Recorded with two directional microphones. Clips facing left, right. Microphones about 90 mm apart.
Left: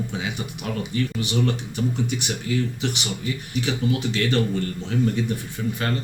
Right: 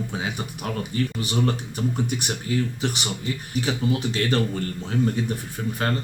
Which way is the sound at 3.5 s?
40° right (ahead or behind).